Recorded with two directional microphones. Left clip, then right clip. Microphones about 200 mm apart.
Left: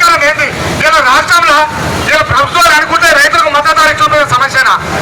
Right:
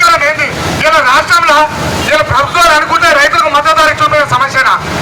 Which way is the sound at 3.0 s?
10° left (ahead or behind).